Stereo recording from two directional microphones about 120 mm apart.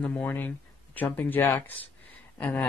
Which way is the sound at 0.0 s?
15° left (ahead or behind).